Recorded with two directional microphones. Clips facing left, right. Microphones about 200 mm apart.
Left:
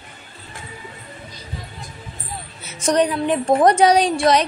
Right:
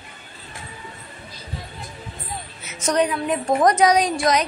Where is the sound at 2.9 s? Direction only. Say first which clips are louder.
Left 3 dB; 35° left (ahead or behind).